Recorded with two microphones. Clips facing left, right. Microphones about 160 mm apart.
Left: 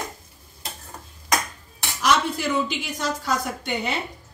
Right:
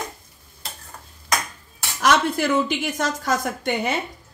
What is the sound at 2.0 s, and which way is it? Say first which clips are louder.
Speech: right 3 dB; 55° right (ahead or behind).